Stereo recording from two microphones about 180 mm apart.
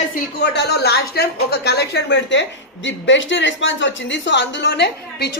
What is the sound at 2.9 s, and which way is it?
Speech, 90° left.